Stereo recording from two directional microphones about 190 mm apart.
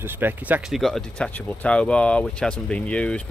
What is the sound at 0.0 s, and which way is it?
Speech, 10° right (ahead or behind).